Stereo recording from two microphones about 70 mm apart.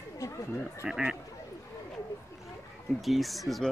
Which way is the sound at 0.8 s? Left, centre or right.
Centre.